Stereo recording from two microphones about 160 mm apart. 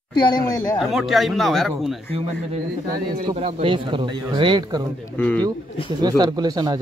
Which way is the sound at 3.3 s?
35° right (ahead or behind).